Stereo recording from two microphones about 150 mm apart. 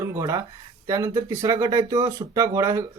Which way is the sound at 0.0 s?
20° right (ahead or behind).